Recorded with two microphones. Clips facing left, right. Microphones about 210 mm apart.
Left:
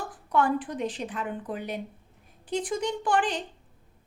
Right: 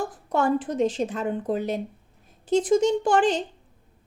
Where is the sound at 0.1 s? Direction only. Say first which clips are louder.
Right 2 dB; 45° right (ahead or behind).